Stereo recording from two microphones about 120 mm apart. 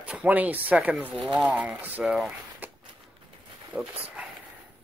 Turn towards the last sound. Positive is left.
turn(degrees=-5)  # may be behind; listen again after turning